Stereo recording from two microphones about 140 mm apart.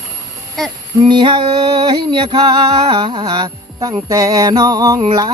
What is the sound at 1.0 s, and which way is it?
Music, 30° right (ahead or behind).